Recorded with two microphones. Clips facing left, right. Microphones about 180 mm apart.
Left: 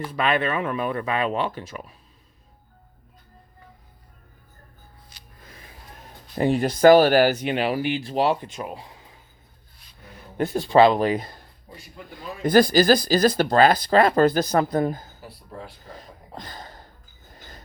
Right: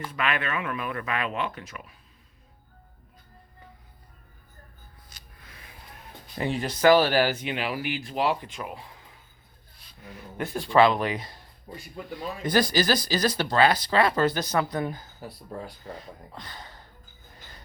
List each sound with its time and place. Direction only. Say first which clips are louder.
0.1 s speech: left 6 dB; 35° left (ahead or behind)
5.4 s a sound: left 5 dB; 40° left (ahead or behind)
6.5 s speech: left 5 dB; 50° left (ahead or behind); by 8.8 s 25° left (ahead or behind)
10.5 s speech: left 4 dB; 30° left (ahead or behind); by 11.3 s 45° left (ahead or behind)
12.5 s speech: left 7 dB; 50° left (ahead or behind)
16.3 s speech: left 4 dB; 45° left (ahead or behind)